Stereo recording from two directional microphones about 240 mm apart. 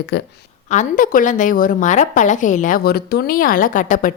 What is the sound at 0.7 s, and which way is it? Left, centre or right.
A woman's voice, left.